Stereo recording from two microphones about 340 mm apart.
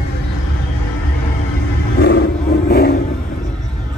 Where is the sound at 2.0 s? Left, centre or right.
Left.